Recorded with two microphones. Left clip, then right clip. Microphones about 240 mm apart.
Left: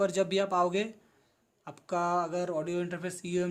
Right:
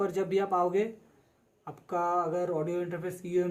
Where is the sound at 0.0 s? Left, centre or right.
Left.